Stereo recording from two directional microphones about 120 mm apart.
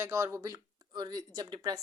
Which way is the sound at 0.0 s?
25° right (ahead or behind).